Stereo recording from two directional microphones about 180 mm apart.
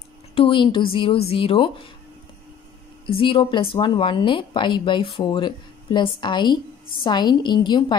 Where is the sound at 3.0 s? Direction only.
30° left (ahead or behind).